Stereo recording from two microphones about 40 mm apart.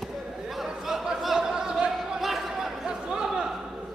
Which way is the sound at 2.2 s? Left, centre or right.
Centre.